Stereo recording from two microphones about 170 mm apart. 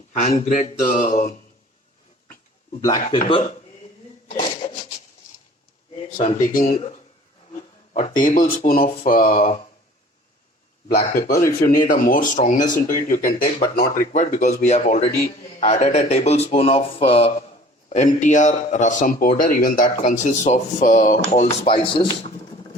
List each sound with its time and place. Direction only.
0.3 s speech: 40° left (ahead or behind)
3.0 s speech: 30° left (ahead or behind)
6.1 s speech: 55° left (ahead or behind)
7.9 s speech: 50° left (ahead or behind)
11.1 s speech: 60° left (ahead or behind)
21.6 s speech: 35° left (ahead or behind)